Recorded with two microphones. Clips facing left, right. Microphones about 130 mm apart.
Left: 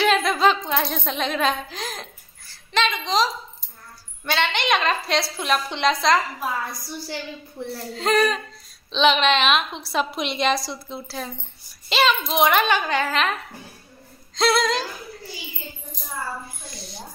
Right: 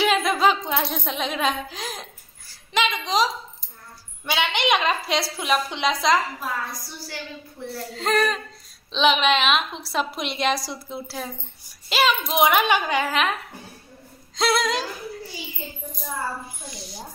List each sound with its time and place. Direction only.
0.0 s a child's voice: 10° right (ahead or behind)
7.6 s speech: 20° left (ahead or behind)
7.9 s a woman's voice: centre (ahead or behind)
16.6 s a child's voice: 15° right (ahead or behind)